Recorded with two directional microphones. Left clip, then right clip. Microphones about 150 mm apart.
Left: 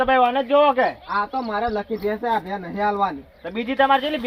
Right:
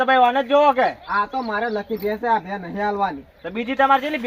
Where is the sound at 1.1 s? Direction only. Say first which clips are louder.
Right 1 dB; 5° right (ahead or behind).